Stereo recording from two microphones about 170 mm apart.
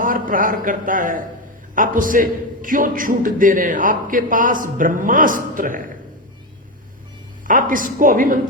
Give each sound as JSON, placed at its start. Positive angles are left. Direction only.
{"t": 0.0, "sound": "a man's voice", "side_deg": -55}
{"t": 7.4, "sound": "a man's voice", "side_deg": -55}